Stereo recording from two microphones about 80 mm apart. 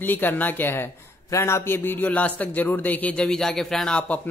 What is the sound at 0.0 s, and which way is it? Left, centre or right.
Speech, left.